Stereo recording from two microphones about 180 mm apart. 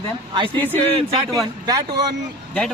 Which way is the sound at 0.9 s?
25° right (ahead or behind).